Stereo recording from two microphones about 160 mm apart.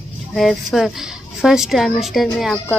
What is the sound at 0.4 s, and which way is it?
Speech, centre (ahead or behind).